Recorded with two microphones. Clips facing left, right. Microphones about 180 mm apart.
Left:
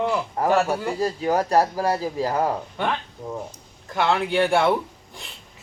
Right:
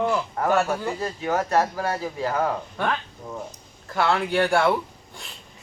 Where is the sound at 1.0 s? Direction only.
35° left (ahead or behind).